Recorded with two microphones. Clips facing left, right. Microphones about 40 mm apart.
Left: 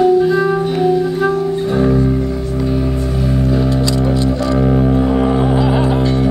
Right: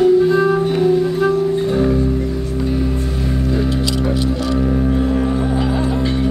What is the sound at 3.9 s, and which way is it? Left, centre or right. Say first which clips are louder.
Music: left 3 dB; left.